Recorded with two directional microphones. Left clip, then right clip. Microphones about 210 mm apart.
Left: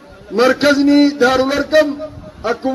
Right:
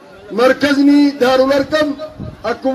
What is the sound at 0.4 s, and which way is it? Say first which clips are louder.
A man's voice: even; 25° left (ahead or behind).